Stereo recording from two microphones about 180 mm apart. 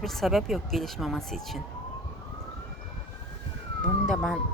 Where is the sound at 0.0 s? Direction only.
Centre (ahead or behind).